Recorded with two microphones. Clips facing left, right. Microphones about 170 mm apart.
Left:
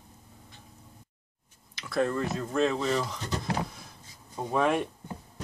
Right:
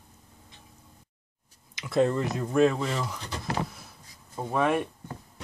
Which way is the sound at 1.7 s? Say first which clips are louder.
Right 4 dB; 20° right (ahead or behind).